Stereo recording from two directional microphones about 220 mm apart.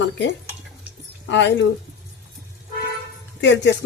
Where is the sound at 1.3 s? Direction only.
55° left (ahead or behind).